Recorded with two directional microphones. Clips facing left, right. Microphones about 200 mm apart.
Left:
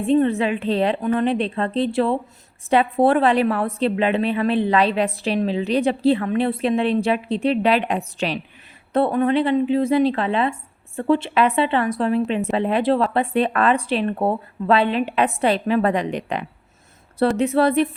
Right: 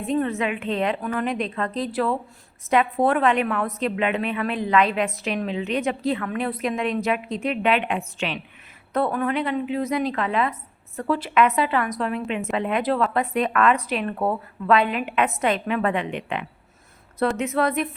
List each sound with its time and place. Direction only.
0.0 s a woman's voice: 30° left (ahead or behind)